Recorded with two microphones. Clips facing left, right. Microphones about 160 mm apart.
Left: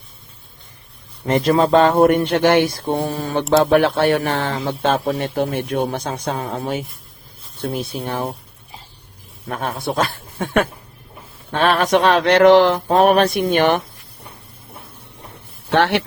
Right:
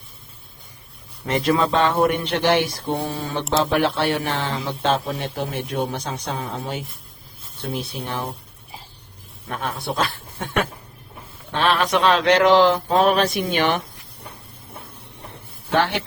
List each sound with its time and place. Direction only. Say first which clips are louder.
1.3 s speech: left 5 dB; 40° left (ahead or behind)
9.5 s speech: left 4 dB; 50° left (ahead or behind)
15.7 s speech: left 4 dB; 70° left (ahead or behind)